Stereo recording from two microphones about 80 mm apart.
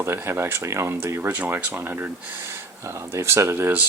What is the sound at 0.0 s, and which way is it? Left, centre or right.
Speech, right.